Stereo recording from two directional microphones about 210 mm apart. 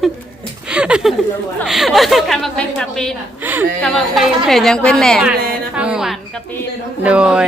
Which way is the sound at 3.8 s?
Centre (ahead or behind).